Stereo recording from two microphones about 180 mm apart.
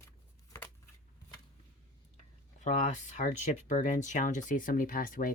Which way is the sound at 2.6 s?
40° left (ahead or behind).